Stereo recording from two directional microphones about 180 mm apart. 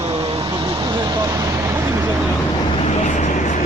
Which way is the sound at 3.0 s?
40° left (ahead or behind).